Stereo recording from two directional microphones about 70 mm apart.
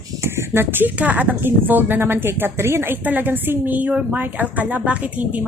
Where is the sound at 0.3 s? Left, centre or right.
Right.